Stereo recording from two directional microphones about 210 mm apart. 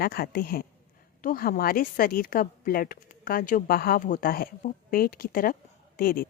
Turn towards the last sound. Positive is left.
turn(degrees=45)  # may be behind; listen again after turning